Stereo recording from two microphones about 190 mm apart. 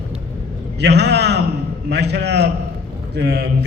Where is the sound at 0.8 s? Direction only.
60° right (ahead or behind).